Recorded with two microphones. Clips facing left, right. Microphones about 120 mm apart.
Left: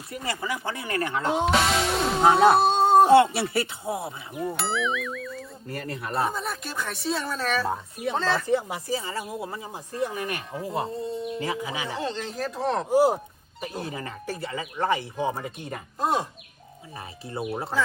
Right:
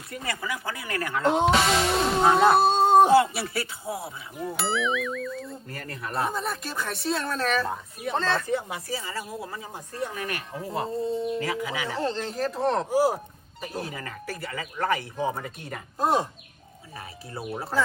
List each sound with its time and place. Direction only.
0.1 s speech: 25° left (ahead or behind)
1.3 s music: centre (ahead or behind)
3.3 s speech: 25° left (ahead or behind)
4.4 s speech: centre (ahead or behind)
5.6 s speech: 25° left (ahead or behind)
6.1 s music: centre (ahead or behind)
8.9 s speech: 25° left (ahead or behind)
10.5 s music: centre (ahead or behind)
11.3 s speech: 20° left (ahead or behind)
11.9 s music: centre (ahead or behind)
13.9 s speech: 25° left (ahead or behind)
15.1 s music: centre (ahead or behind)